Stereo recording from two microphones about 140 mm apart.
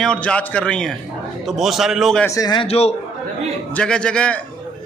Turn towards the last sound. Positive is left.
turn(degrees=10)  # may be behind; listen again after turning